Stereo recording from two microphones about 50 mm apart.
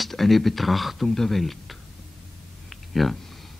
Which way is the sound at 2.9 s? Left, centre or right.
Centre.